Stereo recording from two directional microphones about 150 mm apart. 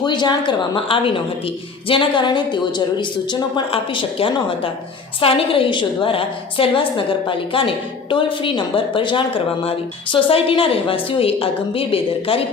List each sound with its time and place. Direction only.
0.0 s a woman's voice: 30° left (ahead or behind)